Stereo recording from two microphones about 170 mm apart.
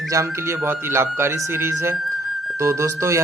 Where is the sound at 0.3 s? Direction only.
15° right (ahead or behind).